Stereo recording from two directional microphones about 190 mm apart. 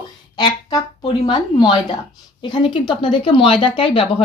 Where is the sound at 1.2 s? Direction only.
25° left (ahead or behind).